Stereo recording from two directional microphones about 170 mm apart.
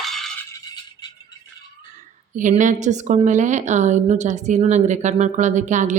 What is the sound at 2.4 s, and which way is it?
A woman's voice, 50° right (ahead or behind).